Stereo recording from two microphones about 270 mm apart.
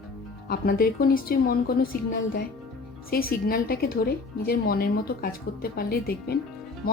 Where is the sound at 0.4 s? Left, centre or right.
Left.